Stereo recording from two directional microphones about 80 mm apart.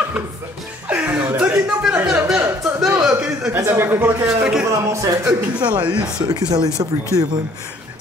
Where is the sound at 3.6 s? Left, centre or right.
Right.